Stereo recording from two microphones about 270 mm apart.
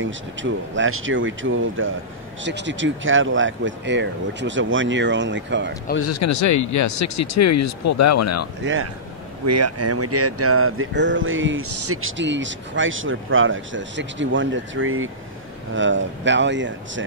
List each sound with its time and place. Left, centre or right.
0.0 s speech: right
5.9 s speech: left
9.5 s speech: right